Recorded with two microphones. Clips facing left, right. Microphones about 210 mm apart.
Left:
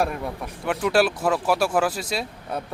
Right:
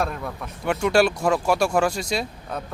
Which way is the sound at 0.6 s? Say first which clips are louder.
Right 1 dB; centre (ahead or behind).